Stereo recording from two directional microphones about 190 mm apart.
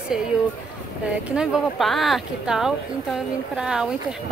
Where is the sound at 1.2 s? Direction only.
5° right (ahead or behind).